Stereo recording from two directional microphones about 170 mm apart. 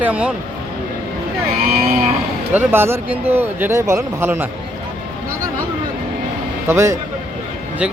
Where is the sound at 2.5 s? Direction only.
15° right (ahead or behind).